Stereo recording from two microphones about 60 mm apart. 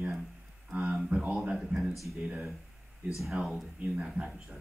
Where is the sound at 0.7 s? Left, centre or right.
Right.